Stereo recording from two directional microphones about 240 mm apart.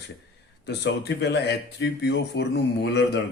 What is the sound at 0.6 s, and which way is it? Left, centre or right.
Speech, left.